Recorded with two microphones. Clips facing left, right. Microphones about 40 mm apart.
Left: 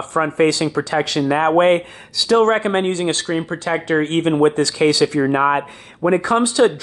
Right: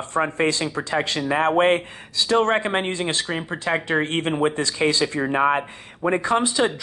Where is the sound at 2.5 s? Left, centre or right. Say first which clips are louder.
Left 5 dB; centre.